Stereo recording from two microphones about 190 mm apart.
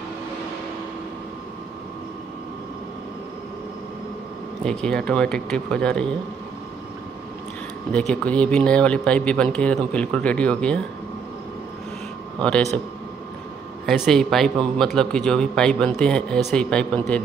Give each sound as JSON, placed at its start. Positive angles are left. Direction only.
{"t": 4.6, "sound": "speech", "side_deg": 5}
{"t": 7.9, "sound": "speech", "side_deg": 5}
{"t": 12.4, "sound": "speech", "side_deg": 5}
{"t": 13.8, "sound": "speech", "side_deg": 0}